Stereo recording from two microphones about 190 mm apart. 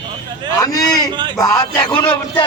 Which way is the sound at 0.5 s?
20° left (ahead or behind).